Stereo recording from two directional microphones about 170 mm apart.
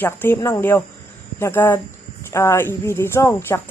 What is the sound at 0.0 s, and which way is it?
Speech, 10° left (ahead or behind).